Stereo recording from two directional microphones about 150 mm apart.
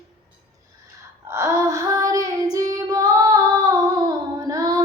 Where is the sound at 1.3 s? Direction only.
15° right (ahead or behind).